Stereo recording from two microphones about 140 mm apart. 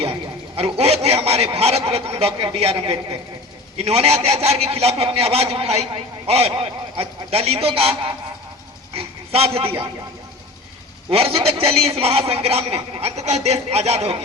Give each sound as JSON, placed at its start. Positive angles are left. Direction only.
{"t": 0.0, "sound": "a man's voice", "side_deg": -45}
{"t": 8.9, "sound": "a sound", "side_deg": -45}
{"t": 9.6, "sound": "a man's voice", "side_deg": -40}
{"t": 11.1, "sound": "a man's voice", "side_deg": -45}